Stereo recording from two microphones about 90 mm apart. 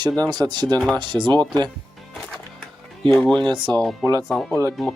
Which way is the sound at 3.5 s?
60° right (ahead or behind).